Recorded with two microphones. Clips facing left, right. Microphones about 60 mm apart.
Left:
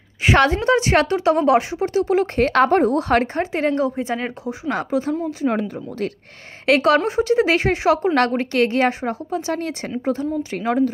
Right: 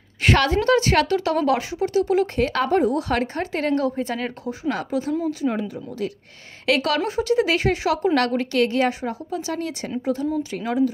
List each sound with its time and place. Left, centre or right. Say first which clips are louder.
0.4 s a woman's voice: left 3 dB; left
2.4 s a woman's voice: left 4 dB; left
3.5 s a woman's voice: left 1 dB; left
5.5 s a woman's voice: left 3 dB; left
6.6 s a woman's voice: left 5 dB; left